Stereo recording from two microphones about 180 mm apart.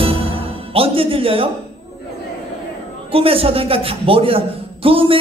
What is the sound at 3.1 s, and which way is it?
A man's voice, 30° right (ahead or behind).